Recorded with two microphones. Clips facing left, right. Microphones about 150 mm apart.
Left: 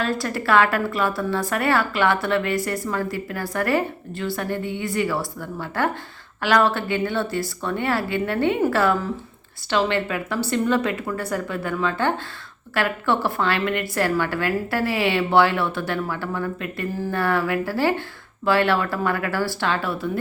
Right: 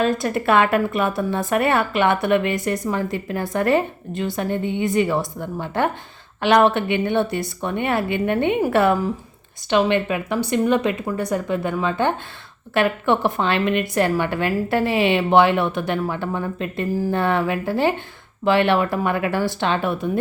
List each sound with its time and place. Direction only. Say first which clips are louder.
0.0 s a woman's voice: right 4 dB; 20° right (ahead or behind)